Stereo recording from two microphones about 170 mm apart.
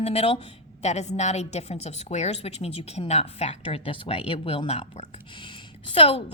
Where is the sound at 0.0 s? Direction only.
35° left (ahead or behind).